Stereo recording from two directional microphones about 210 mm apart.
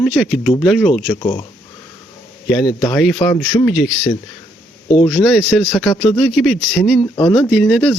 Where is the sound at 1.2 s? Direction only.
20° left (ahead or behind).